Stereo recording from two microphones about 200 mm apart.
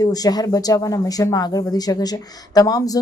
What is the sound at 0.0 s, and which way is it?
Speech, 20° left (ahead or behind).